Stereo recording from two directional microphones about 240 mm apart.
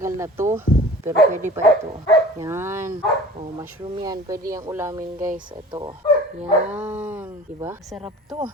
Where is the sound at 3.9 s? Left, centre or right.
Centre.